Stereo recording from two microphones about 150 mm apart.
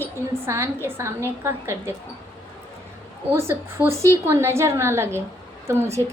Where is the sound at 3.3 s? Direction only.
15° right (ahead or behind).